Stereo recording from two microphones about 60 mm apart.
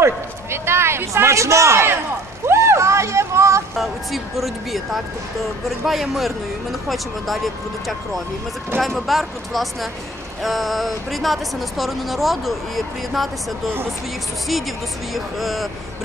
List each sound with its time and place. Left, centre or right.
0.0 s a sound: right
3.7 s speech: centre
8.7 s speech: centre
15.1 s speech: centre